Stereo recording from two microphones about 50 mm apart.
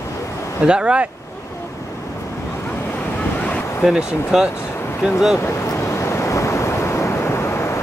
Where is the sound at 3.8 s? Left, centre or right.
Centre.